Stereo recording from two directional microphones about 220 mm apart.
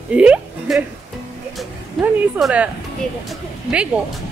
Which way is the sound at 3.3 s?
5° right (ahead or behind).